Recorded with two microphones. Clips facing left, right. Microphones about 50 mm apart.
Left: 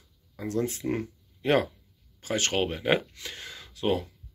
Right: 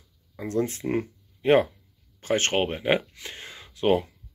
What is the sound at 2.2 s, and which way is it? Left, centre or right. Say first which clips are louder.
Speech: right 3 dB; right.